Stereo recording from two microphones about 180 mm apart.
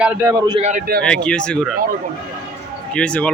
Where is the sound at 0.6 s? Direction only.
45° right (ahead or behind).